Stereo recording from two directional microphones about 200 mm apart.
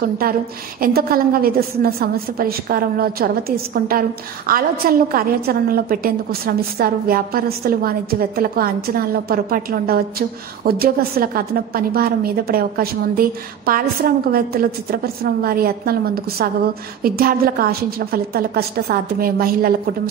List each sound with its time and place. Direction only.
0.7 s a woman's voice: 50° right (ahead or behind)